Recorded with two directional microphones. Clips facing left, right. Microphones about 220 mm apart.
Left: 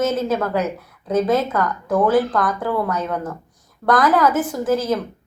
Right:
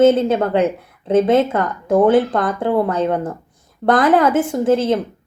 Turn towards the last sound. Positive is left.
turn(degrees=-25)  # may be behind; listen again after turning